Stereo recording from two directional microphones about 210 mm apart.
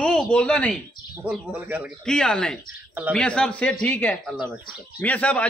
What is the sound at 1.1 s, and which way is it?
A man's voice, 5° right (ahead or behind).